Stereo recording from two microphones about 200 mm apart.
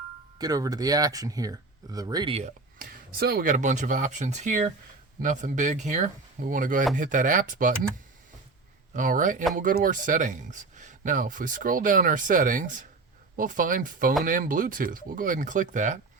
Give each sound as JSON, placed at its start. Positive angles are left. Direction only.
{"t": 0.3, "sound": "speech", "side_deg": -20}
{"t": 2.7, "sound": "speech", "side_deg": -50}
{"t": 8.9, "sound": "speech", "side_deg": -40}